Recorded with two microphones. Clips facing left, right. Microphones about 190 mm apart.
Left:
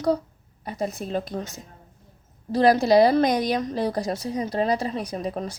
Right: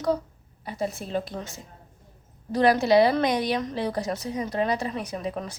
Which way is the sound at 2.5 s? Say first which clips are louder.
Left 2 dB; 35° left (ahead or behind).